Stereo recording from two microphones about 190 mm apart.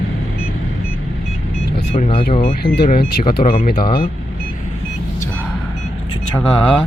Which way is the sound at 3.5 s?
45° left (ahead or behind).